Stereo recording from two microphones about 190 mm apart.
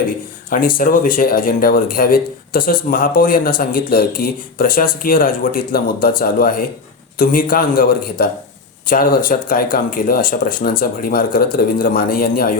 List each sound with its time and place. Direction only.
0.8 s speech: 45° left (ahead or behind)